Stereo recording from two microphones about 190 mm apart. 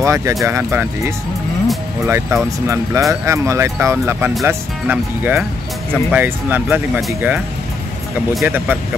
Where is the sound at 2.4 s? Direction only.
15° right (ahead or behind).